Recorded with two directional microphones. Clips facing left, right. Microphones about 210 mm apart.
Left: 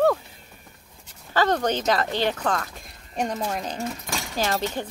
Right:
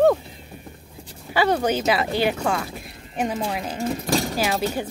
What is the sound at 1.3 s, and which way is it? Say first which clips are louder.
A woman's voice: right 2 dB; 10° right (ahead or behind).